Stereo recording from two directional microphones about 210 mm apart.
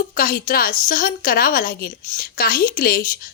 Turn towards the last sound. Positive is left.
turn(degrees=45)  # may be behind; listen again after turning